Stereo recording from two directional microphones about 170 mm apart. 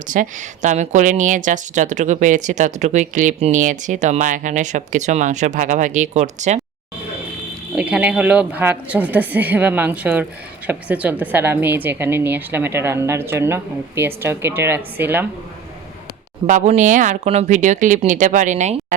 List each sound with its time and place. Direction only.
0.1 s speech: 50° right (ahead or behind)
7.8 s a woman's voice: 5° right (ahead or behind)
16.5 s speech: 45° right (ahead or behind)